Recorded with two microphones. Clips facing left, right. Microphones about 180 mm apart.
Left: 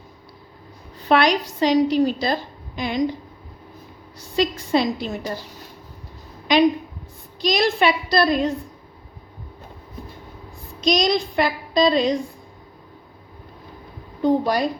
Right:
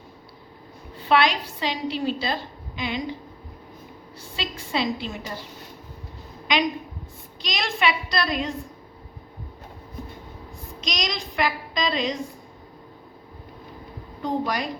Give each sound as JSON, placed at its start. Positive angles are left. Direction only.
{"t": 1.0, "sound": "a woman's voice", "side_deg": 45}
{"t": 4.2, "sound": "child singing", "side_deg": 40}
{"t": 7.4, "sound": "child singing", "side_deg": 35}
{"t": 10.8, "sound": "child singing", "side_deg": 35}
{"t": 14.2, "sound": "child singing", "side_deg": 35}